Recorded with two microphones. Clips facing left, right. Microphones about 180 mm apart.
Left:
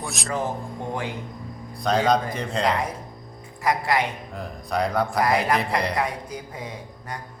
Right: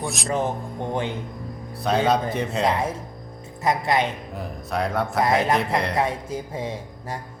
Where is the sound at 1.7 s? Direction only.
5° right (ahead or behind).